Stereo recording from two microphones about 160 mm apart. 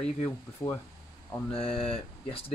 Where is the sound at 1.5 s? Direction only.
35° left (ahead or behind).